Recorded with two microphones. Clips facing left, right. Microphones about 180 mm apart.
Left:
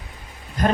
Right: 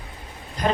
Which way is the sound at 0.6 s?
50° left (ahead or behind).